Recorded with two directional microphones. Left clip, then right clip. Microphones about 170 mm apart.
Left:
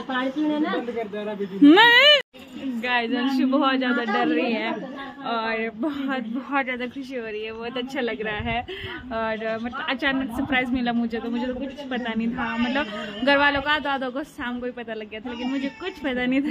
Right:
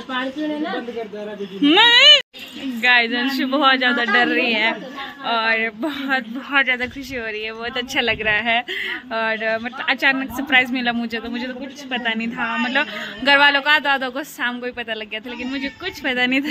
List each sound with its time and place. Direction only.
0.2 s speech: centre (ahead or behind)
1.6 s speech: 30° left (ahead or behind)
2.8 s speech: 5° right (ahead or behind)